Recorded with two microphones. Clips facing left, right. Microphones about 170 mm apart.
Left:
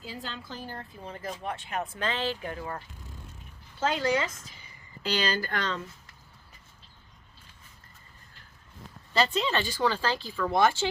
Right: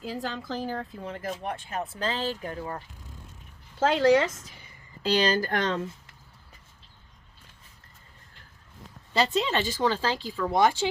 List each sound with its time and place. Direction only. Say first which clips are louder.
0.0 s a woman's voice: right 7 dB; 80° right
1.2 s speech: right 1 dB; 50° right (ahead or behind)
1.7 s speech: even; 35° right (ahead or behind)
3.8 s speech: right 6 dB; 80° right; by 4.7 s 60° right (ahead or behind)
5.0 s speech: right 5 dB; 40° right (ahead or behind)
9.5 s speech: right 2 dB; 20° right (ahead or behind)